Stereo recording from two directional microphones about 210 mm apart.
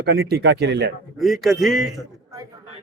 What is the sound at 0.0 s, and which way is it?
Speech, 50° right (ahead or behind).